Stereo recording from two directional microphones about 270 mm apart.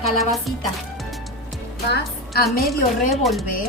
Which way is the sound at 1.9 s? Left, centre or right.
Left.